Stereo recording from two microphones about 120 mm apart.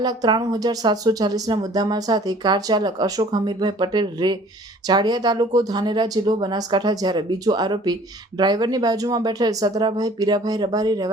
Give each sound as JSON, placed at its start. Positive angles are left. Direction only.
{"t": 0.0, "sound": "speech", "side_deg": -35}